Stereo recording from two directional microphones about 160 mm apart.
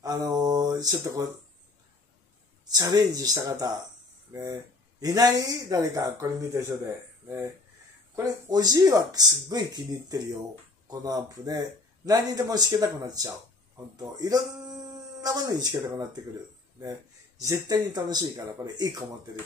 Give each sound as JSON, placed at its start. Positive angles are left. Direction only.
{"t": 0.0, "sound": "mantra", "side_deg": -25}
{"t": 2.6, "sound": "speech", "side_deg": -25}
{"t": 17.4, "sound": "speech", "side_deg": -25}